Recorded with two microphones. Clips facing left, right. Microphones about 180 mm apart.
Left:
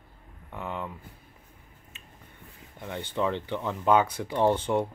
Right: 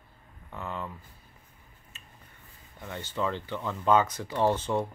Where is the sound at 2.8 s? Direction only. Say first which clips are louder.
Left 3 dB; 15° left (ahead or behind).